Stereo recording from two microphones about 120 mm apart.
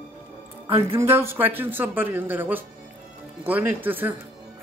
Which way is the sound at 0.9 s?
20° right (ahead or behind).